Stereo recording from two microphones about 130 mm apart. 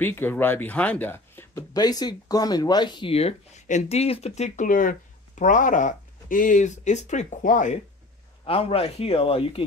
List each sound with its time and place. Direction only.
0.0 s speech: 15° left (ahead or behind)
1.7 s speech: 30° left (ahead or behind)
3.1 s speech: 50° left (ahead or behind); by 7.8 s 75° left (ahead or behind)
8.5 s speech: 45° left (ahead or behind)